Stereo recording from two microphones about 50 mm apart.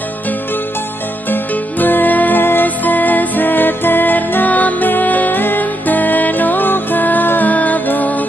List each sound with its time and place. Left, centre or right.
1.3 s music: left